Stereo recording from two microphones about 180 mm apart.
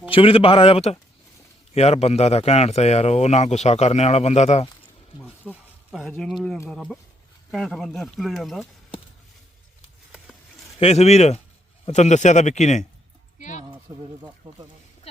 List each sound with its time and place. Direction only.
0.1 s speech: 30° left (ahead or behind)
5.5 s speech: centre (ahead or behind)
10.8 s speech: 35° left (ahead or behind)
13.9 s speech: 15° right (ahead or behind)
15.1 s speech: 35° left (ahead or behind)